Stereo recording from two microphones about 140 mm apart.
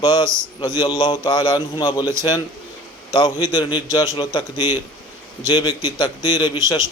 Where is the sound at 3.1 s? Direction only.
30° left (ahead or behind).